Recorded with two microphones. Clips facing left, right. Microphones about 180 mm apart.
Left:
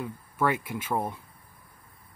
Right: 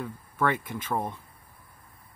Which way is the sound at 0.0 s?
5° left (ahead or behind).